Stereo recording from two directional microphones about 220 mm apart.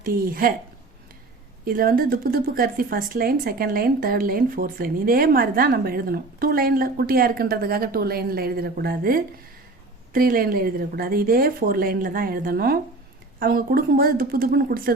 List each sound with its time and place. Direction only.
0.0 s speech: 40° right (ahead or behind)
1.6 s speech: 40° right (ahead or behind)